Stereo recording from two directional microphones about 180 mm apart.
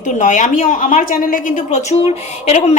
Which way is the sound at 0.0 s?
45° left (ahead or behind).